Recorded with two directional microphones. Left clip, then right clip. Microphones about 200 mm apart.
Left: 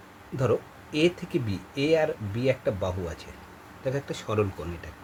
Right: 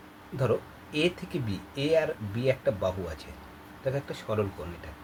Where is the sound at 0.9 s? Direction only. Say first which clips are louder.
Left 4 dB; 35° left (ahead or behind).